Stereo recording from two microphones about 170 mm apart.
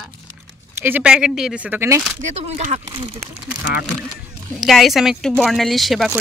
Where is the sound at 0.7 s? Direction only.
10° right (ahead or behind).